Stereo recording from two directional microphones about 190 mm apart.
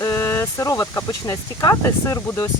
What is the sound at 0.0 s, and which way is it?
Speech, 15° left (ahead or behind).